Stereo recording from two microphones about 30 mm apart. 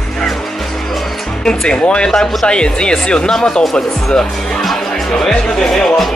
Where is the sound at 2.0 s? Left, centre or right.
Centre.